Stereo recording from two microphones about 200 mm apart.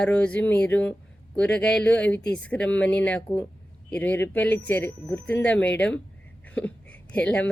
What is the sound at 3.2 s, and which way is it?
Speech, 20° left (ahead or behind).